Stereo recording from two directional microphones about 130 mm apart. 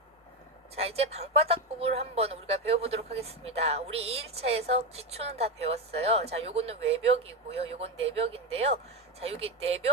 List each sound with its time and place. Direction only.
0.8 s speech: 50° right (ahead or behind)